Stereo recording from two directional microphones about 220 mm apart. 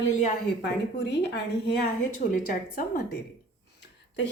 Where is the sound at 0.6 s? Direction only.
50° left (ahead or behind).